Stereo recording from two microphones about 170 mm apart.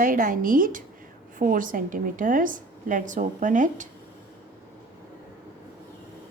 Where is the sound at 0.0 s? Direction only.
55° right (ahead or behind).